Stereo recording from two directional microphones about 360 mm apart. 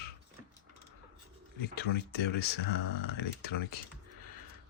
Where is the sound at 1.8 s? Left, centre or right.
Left.